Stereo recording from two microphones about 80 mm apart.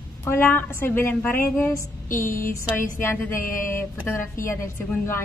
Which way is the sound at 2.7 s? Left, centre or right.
Left.